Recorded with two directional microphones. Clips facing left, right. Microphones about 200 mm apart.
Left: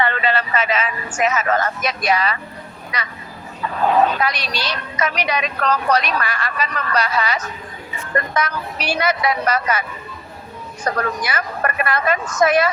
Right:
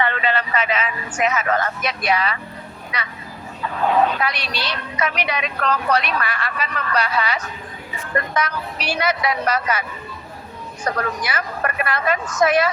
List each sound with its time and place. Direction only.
0.0 s a woman's voice: 35° left (ahead or behind)
4.2 s a woman's voice: 40° left (ahead or behind)
10.9 s a woman's voice: 45° left (ahead or behind)